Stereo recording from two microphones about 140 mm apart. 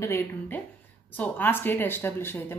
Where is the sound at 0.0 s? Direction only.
20° left (ahead or behind).